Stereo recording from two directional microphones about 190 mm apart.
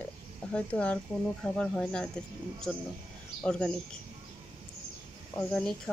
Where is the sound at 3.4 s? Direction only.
5° left (ahead or behind).